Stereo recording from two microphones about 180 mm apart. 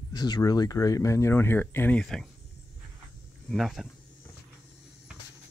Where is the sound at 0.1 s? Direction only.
20° left (ahead or behind); by 2.2 s 5° left (ahead or behind).